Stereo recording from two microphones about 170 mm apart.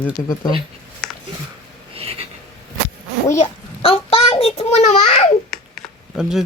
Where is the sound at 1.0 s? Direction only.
Centre (ahead or behind).